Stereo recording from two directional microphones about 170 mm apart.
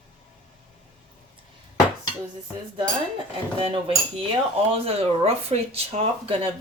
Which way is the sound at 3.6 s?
30° right (ahead or behind).